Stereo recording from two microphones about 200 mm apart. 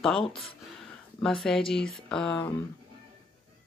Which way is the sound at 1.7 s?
Centre (ahead or behind).